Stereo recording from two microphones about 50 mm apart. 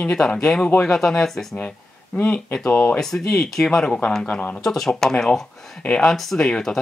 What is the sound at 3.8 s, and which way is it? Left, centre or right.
Speech, left.